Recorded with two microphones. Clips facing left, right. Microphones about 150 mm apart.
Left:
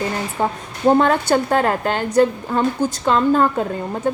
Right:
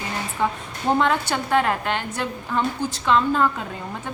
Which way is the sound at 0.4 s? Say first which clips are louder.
Left 6 dB; 40° left (ahead or behind).